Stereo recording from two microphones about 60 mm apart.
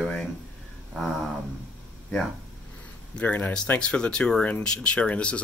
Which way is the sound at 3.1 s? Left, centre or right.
Left.